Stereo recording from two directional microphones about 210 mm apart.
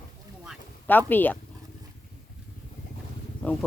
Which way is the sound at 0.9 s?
10° left (ahead or behind).